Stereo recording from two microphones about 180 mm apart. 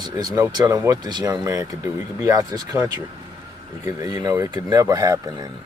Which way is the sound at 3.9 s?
20° right (ahead or behind).